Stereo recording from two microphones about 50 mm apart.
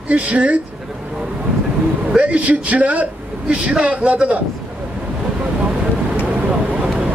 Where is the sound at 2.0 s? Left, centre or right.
Right.